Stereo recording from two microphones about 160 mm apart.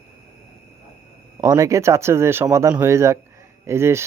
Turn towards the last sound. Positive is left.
turn(degrees=-15)  # may be behind; listen again after turning